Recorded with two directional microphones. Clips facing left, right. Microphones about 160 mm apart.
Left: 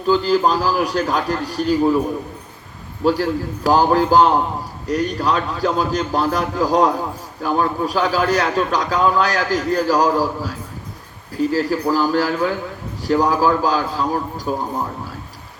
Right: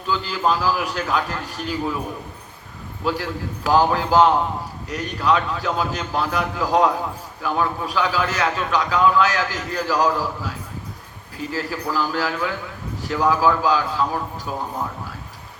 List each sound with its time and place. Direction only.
0.1 s a man's voice: 40° left (ahead or behind)
3.0 s a man's voice: 40° left (ahead or behind)
11.5 s a man's voice: 35° left (ahead or behind)